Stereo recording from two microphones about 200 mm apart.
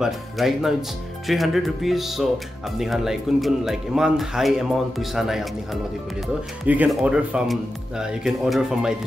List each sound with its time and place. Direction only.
0.0 s speech: centre (ahead or behind)